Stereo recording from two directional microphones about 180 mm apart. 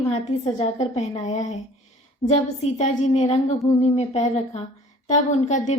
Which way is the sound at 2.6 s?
40° left (ahead or behind).